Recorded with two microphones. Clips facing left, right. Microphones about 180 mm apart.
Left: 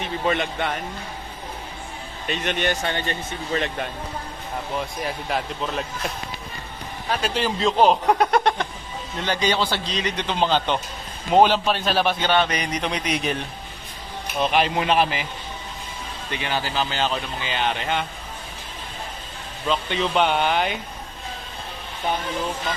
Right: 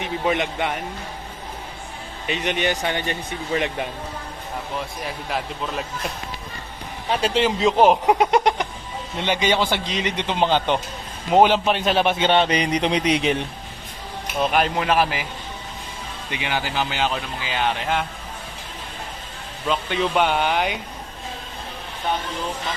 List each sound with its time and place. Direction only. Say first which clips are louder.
0.0 s speech: right 1 dB; 15° right (ahead or behind)
2.2 s speech: right 1 dB; 15° right (ahead or behind)
5.0 s speech: left 1 dB; centre (ahead or behind)
7.1 s a man's voice: right 4 dB; 25° right (ahead or behind)
7.8 s a man's voice: right 1 dB; 15° right (ahead or behind)
14.3 s speech: even; 5° right (ahead or behind)
16.3 s speech: even; 15° right (ahead or behind)
17.5 s speech: right 2 dB; 5° right (ahead or behind)
19.6 s speech: right 1 dB; 10° right (ahead or behind)